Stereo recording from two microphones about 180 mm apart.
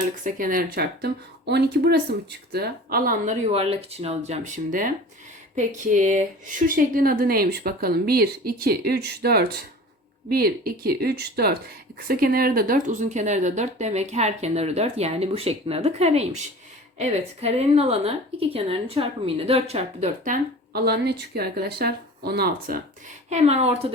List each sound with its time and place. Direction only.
0.3 s a woman's voice: 50° right (ahead or behind)
23.3 s speech: 35° right (ahead or behind)